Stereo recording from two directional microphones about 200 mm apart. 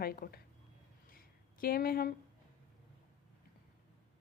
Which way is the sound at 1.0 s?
45° left (ahead or behind).